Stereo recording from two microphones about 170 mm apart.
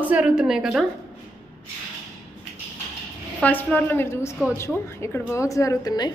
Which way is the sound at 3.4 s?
10° left (ahead or behind).